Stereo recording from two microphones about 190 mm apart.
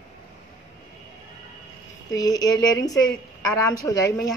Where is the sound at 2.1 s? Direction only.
20° left (ahead or behind).